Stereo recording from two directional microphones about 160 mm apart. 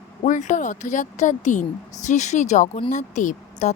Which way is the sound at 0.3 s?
50° left (ahead or behind).